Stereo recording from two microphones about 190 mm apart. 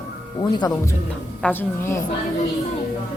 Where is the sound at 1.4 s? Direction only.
10° left (ahead or behind).